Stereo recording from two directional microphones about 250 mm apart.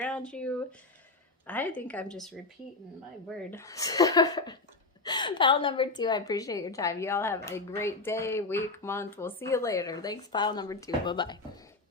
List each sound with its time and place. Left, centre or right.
0.0 s a woman's voice: centre